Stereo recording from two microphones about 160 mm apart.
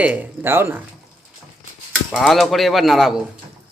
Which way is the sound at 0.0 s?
10° right (ahead or behind).